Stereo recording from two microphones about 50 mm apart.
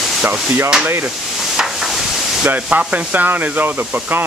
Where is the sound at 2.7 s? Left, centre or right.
Right.